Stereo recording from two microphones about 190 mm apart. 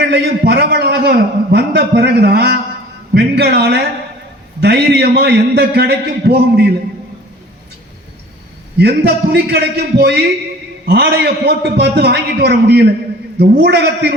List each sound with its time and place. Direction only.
0.0 s a man's voice: 60° right (ahead or behind)
8.8 s a man's voice: 60° right (ahead or behind)